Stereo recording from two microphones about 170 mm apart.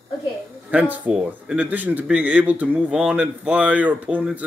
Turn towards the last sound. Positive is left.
turn(degrees=-10)  # may be behind; listen again after turning